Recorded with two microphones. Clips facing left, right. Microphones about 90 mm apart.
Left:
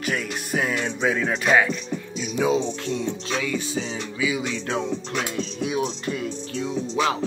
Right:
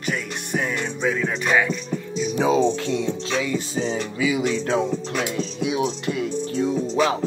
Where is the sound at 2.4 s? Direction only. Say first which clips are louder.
Right 2 dB; 40° right (ahead or behind).